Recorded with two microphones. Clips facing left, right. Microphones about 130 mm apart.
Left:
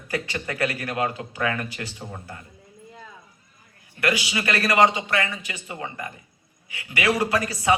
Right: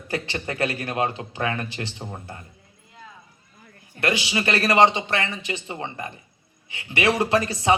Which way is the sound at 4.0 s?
25° right (ahead or behind).